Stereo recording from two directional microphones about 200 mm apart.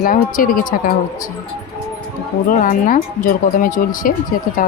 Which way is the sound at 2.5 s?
40° left (ahead or behind).